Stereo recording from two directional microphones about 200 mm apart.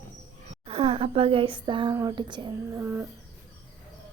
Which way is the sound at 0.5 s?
30° right (ahead or behind).